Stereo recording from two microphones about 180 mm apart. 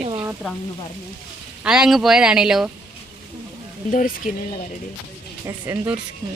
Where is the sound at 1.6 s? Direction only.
5° right (ahead or behind).